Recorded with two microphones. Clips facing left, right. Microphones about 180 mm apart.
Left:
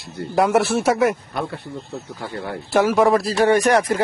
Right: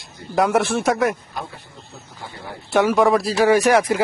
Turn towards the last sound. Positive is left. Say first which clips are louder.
# right 1 dB
turn(degrees=0)  # may be behind; listen again after turning